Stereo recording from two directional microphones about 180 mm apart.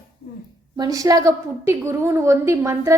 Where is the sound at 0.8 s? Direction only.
20° right (ahead or behind).